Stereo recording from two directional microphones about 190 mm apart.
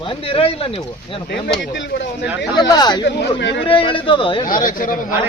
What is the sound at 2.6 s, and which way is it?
Speech, 20° left (ahead or behind).